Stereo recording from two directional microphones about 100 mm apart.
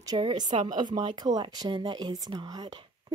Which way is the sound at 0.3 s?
50° right (ahead or behind).